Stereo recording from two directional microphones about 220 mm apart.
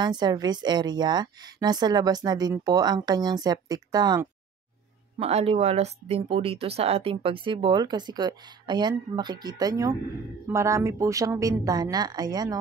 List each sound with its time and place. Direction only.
0.0 s a woman's voice: 20° right (ahead or behind)